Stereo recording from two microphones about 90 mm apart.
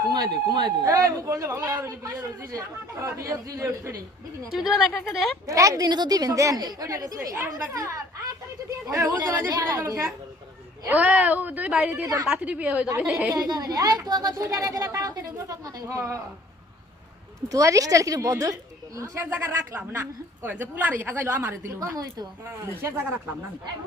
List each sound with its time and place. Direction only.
0.1 s speech: 50° right (ahead or behind)
0.9 s a woman's voice: 35° right (ahead or behind)
4.5 s speech: 5° right (ahead or behind)
5.5 s a woman's voice: 40° right (ahead or behind)
7.3 s a woman's voice: 25° right (ahead or behind)
10.8 s speech: 15° right (ahead or behind)
12.0 s a woman's voice: 35° right (ahead or behind)
12.3 s speech: 15° right (ahead or behind)
13.3 s a woman's voice: 45° right (ahead or behind)
17.5 s a woman's voice: 40° right (ahead or behind)
21.9 s speech: 45° right (ahead or behind)
22.6 s a woman's voice: 30° right (ahead or behind)